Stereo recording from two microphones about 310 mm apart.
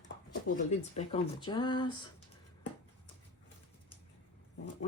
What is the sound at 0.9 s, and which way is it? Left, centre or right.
Speech, centre.